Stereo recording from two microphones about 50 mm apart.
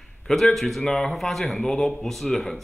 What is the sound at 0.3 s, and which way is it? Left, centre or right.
A man's voice, centre.